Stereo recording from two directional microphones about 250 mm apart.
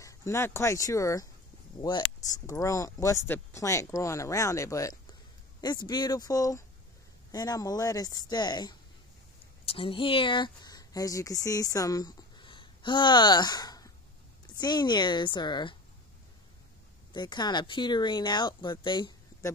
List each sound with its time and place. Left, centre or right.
0.0 s speech: centre
17.1 s speech: centre